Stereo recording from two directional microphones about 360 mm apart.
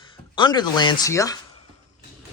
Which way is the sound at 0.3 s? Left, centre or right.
Centre.